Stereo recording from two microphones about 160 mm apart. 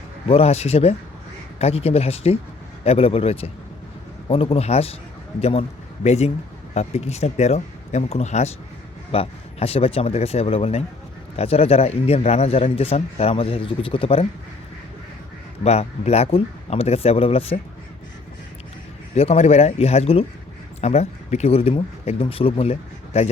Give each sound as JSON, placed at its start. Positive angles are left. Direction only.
{"t": 0.3, "sound": "a man's voice", "side_deg": 40}
{"t": 15.6, "sound": "a man's voice", "side_deg": 40}
{"t": 19.1, "sound": "a man's voice", "side_deg": 40}